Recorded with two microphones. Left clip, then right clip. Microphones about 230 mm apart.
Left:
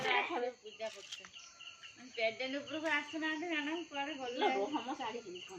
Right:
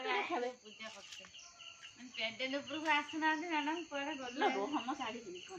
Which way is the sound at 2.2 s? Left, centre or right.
Right.